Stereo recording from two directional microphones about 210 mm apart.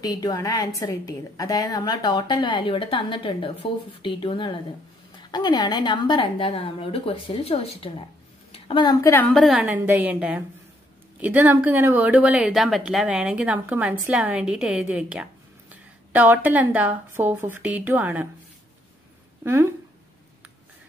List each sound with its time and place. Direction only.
0.0 s a woman's voice: 15° left (ahead or behind); by 18.2 s 10° right (ahead or behind)
19.4 s speech: 10° right (ahead or behind)